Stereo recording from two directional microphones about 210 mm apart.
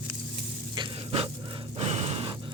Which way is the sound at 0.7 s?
25° right (ahead or behind).